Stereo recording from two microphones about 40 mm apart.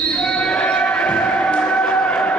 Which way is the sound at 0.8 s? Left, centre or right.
Left.